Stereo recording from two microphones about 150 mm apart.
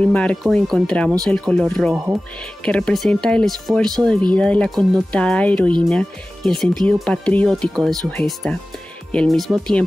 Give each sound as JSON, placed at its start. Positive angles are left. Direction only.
{"t": 0.0, "sound": "speech", "side_deg": 5}